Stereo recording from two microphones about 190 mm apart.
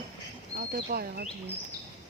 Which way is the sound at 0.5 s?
55° right (ahead or behind).